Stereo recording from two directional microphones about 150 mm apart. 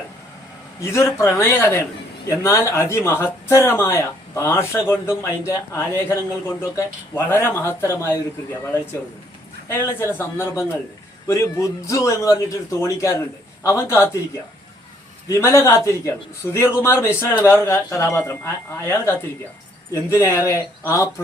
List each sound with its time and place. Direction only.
0.8 s a man's voice: 20° left (ahead or behind)
9.6 s a man's voice: 15° left (ahead or behind)
15.3 s a man's voice: 20° left (ahead or behind)